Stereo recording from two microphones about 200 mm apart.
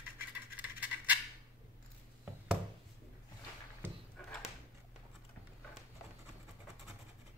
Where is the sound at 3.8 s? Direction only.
10° right (ahead or behind).